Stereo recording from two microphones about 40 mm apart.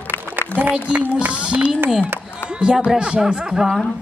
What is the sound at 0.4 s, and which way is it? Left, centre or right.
Speech, right.